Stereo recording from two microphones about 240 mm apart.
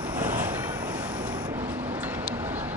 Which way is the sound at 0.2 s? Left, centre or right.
Centre.